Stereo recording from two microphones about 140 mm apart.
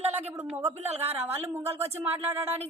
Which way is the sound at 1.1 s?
15° right (ahead or behind).